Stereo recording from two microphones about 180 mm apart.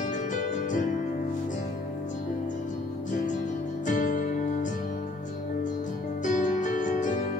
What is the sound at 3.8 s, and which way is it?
Music, 45° left (ahead or behind).